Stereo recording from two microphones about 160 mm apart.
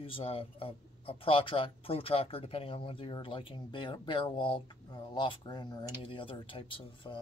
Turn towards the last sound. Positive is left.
turn(degrees=30)  # may be behind; listen again after turning